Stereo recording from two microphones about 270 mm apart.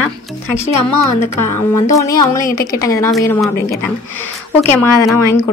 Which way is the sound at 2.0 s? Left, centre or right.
Centre.